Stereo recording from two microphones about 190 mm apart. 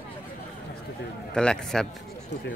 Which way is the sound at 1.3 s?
5° left (ahead or behind).